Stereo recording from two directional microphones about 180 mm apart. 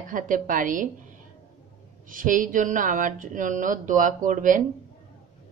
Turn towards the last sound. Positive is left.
turn(degrees=-45)  # may be behind; listen again after turning